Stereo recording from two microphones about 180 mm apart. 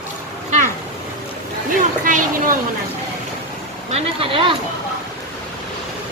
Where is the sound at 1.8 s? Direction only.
50° right (ahead or behind).